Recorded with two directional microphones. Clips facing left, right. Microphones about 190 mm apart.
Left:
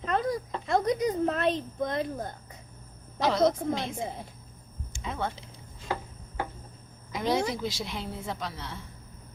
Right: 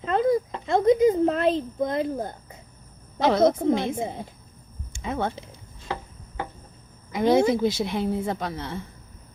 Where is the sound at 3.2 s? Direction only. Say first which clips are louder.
Right 5 dB; 55° right (ahead or behind).